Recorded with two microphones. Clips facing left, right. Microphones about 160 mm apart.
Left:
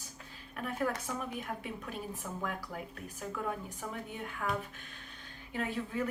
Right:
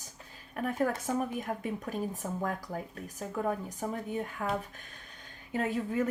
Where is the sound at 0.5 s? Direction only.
45° right (ahead or behind).